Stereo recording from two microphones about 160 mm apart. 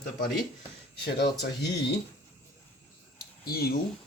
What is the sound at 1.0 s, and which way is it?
Speech, 90° left.